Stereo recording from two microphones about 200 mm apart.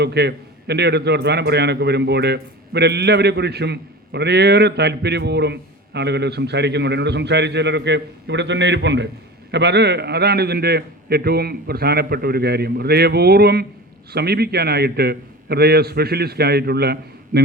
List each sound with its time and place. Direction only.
0.0 s a man's voice: 55° right (ahead or behind)